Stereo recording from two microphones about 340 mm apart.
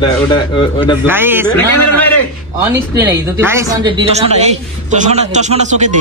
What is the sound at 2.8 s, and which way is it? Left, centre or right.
A man's voice, centre.